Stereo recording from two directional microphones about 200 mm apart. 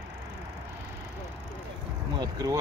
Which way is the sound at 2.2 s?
20° right (ahead or behind).